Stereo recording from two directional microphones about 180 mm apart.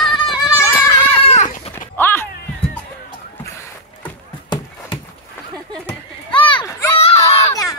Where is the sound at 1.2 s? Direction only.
40° left (ahead or behind).